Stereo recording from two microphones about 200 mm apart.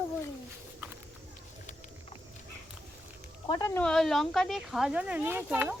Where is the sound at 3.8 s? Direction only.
Centre (ahead or behind).